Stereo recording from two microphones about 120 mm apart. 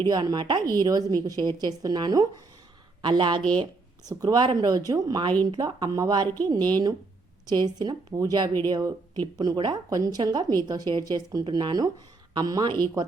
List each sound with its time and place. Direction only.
0.0 s speech: 35° right (ahead or behind)